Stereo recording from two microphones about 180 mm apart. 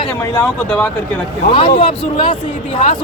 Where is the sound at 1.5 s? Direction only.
30° left (ahead or behind).